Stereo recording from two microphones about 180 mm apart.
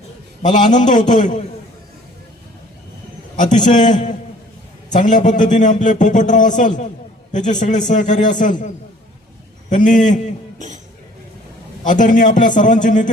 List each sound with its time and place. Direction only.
0.4 s a man's voice: 45° left (ahead or behind)
3.3 s a man's voice: 45° left (ahead or behind)
11.8 s a man's voice: 45° left (ahead or behind)